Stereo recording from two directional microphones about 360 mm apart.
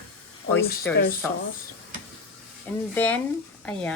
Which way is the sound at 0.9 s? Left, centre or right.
Centre.